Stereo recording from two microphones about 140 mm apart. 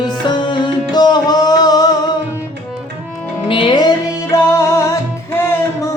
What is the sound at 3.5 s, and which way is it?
Music, 35° left (ahead or behind).